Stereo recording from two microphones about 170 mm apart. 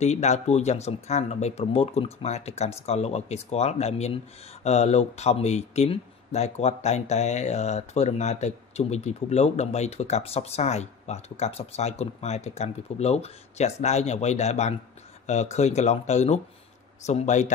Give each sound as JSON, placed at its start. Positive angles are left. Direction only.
{"t": 0.0, "sound": "speech", "side_deg": 40}